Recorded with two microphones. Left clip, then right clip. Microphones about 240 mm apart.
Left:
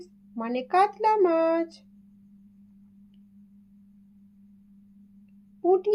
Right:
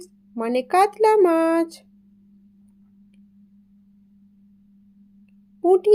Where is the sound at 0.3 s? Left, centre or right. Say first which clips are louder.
Right 5 dB; right.